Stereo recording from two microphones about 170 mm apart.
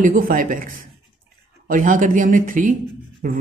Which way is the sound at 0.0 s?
50° right (ahead or behind).